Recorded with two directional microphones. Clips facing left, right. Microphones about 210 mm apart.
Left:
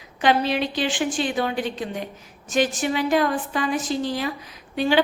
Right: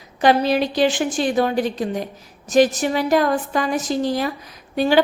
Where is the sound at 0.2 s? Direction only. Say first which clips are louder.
Right 4 dB; 40° right (ahead or behind).